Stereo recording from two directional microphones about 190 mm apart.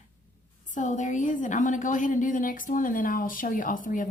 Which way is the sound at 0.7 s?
40° left (ahead or behind).